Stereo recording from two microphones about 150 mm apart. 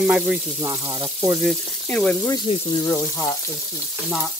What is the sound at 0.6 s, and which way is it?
Frying, 20° right (ahead or behind).